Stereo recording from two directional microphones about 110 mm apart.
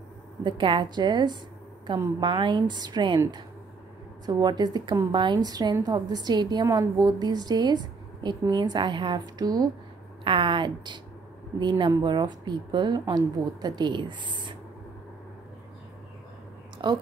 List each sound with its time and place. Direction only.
0.4 s speech: 45° right (ahead or behind)
4.3 s a woman's voice: 40° right (ahead or behind)
10.2 s speech: 50° right (ahead or behind)
12.0 s speech: 40° right (ahead or behind)
16.7 s a sound: 45° right (ahead or behind)